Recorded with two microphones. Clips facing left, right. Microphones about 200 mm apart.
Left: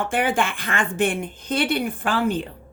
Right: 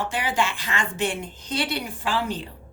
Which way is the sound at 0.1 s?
55° left (ahead or behind).